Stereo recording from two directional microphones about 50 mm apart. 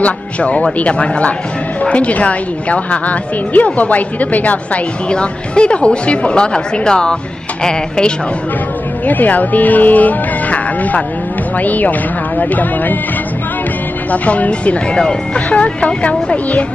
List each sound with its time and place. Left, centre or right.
0.0 s a woman's voice: left
9.0 s speech: left
14.1 s a woman's voice: left